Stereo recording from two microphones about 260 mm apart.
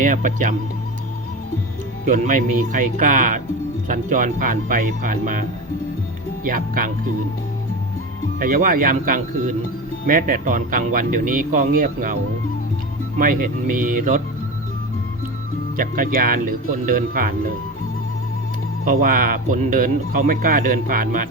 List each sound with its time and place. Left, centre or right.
0.0 s speech: right
2.0 s speech: right
8.4 s speech: right
13.1 s speech: right
15.8 s speech: right
18.9 s speech: right